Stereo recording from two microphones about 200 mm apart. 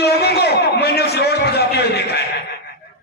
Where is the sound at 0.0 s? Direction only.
55° left (ahead or behind).